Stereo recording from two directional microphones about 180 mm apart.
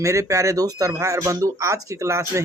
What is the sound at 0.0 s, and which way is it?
Speech, 15° right (ahead or behind).